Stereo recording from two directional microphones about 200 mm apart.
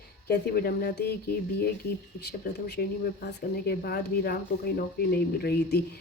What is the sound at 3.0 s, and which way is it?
Speech, 50° left (ahead or behind).